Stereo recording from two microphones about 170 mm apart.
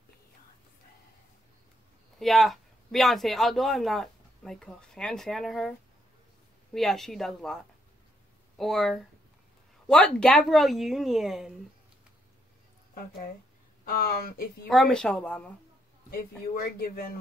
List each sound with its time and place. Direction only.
2.1 s speech: centre (ahead or behind)
13.8 s speech: 60° left (ahead or behind)
14.7 s speech: centre (ahead or behind)